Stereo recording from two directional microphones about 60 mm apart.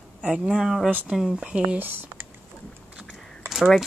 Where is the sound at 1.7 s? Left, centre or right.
Right.